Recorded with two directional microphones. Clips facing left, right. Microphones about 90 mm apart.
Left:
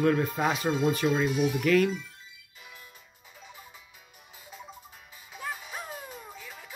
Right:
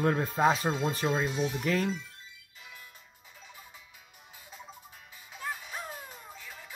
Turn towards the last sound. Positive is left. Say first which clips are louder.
# left 2 dB
turn(degrees=5)  # may be behind; listen again after turning